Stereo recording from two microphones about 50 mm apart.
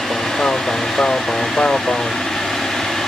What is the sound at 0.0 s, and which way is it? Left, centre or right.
Vehicle, centre.